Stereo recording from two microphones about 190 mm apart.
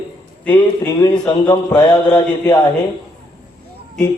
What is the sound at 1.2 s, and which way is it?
A man's voice, 20° left (ahead or behind).